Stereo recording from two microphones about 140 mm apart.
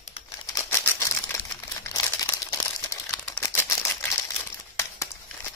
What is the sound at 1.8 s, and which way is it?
Crumpling, 25° left (ahead or behind).